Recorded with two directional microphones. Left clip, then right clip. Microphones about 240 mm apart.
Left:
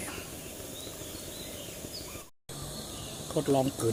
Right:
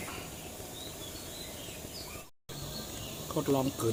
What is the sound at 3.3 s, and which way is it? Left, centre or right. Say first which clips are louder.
Cricket: left 3 dB; left.